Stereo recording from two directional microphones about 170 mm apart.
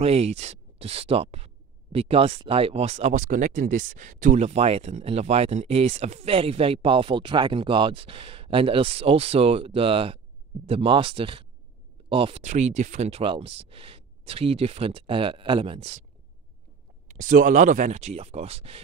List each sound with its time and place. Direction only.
0.0 s speech: 35° right (ahead or behind)
17.1 s speech: 50° right (ahead or behind)